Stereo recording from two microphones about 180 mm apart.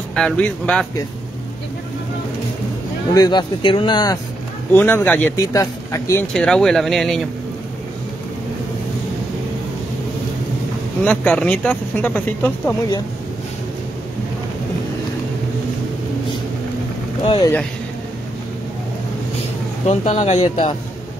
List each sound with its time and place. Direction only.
0.1 s speech: 5° left (ahead or behind)
3.2 s speech: 25° left (ahead or behind)
4.7 s speech: 10° left (ahead or behind)
6.3 s speech: 5° left (ahead or behind)
11.1 s speech: 5° left (ahead or behind)
17.2 s speech: 30° left (ahead or behind)
19.9 s speech: 35° left (ahead or behind)